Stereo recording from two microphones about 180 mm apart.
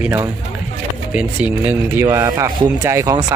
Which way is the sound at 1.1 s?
10° right (ahead or behind).